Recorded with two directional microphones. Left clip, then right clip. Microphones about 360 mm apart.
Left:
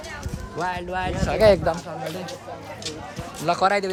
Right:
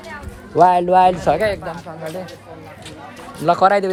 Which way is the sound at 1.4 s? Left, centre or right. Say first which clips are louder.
Left 4 dB; centre.